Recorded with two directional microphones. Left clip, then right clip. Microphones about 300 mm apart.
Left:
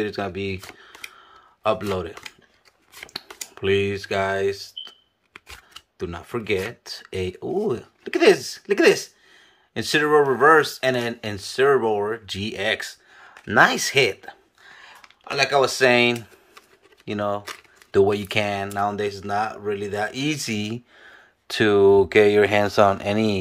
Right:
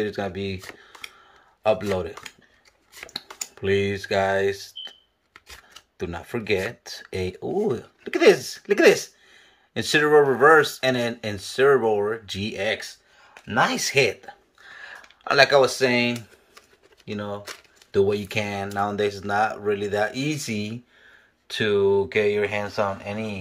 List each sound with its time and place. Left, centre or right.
0.0 s speech: centre
14.8 s speech: centre; by 23.4 s left